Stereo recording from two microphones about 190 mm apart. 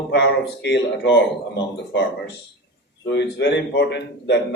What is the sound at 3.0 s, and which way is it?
A man's voice, 65° left (ahead or behind).